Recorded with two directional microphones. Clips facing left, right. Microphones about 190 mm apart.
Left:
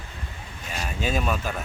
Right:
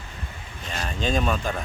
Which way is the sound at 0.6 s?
10° left (ahead or behind).